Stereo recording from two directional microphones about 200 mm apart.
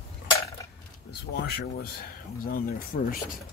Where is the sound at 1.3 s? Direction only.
55° left (ahead or behind).